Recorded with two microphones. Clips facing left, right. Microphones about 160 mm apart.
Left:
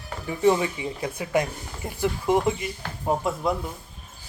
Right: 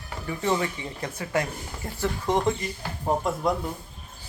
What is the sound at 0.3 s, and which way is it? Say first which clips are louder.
Speech: left 5 dB; 15° left (ahead or behind).